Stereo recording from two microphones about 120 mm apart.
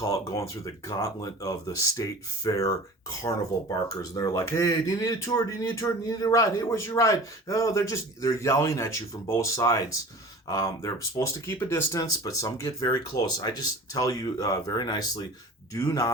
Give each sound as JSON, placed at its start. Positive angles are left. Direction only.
{"t": 0.0, "sound": "speech", "side_deg": 25}
{"t": 3.8, "sound": "speech", "side_deg": 30}